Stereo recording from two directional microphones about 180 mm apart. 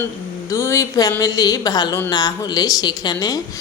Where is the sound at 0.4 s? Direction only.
15° left (ahead or behind).